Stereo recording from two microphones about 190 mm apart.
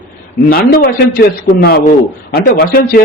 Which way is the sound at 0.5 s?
50° left (ahead or behind).